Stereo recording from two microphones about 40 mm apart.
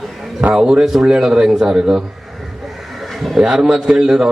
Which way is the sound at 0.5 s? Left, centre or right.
Centre.